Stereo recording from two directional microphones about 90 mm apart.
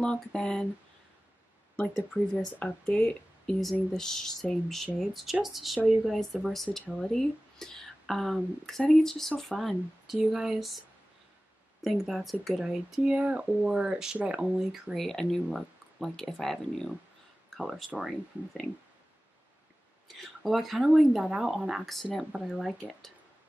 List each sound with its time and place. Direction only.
0.0 s speech: 10° left (ahead or behind)
1.8 s speech: 10° left (ahead or behind)
11.8 s speech: centre (ahead or behind)
20.1 s speech: centre (ahead or behind)